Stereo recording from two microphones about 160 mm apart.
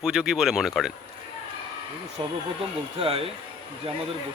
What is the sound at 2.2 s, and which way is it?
Speech, 30° right (ahead or behind).